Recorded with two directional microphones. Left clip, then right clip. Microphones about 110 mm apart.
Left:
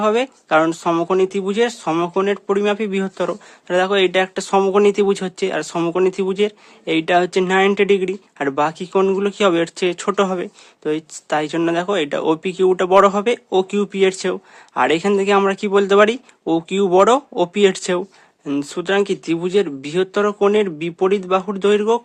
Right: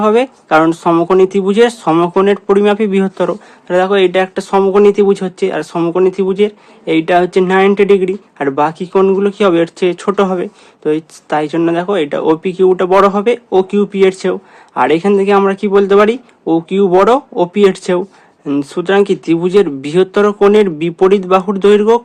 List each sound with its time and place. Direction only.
0.0 s speech: 15° left (ahead or behind)
3.2 s speech: 30° left (ahead or behind); by 22.0 s 15° left (ahead or behind)